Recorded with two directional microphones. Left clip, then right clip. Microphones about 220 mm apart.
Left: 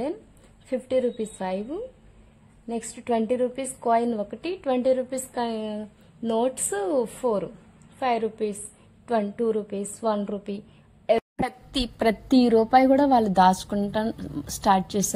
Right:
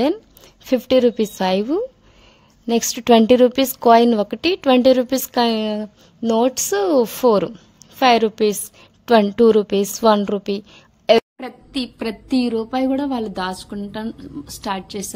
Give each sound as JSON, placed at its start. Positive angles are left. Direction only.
{"t": 0.7, "sound": "a woman's voice", "side_deg": -40}
{"t": 11.3, "sound": "a woman's voice", "side_deg": 25}